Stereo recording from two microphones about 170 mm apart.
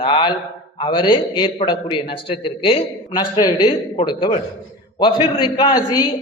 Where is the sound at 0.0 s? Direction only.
30° left (ahead or behind).